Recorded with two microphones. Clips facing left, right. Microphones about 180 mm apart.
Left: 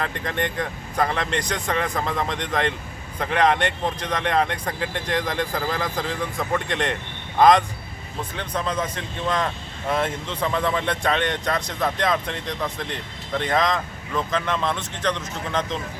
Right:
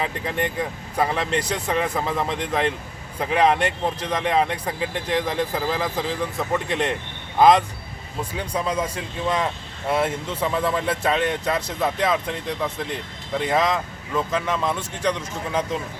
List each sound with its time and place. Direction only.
0.0 s speech: 5° right (ahead or behind)